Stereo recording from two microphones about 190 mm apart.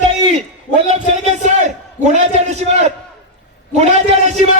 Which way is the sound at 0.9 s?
35° right (ahead or behind).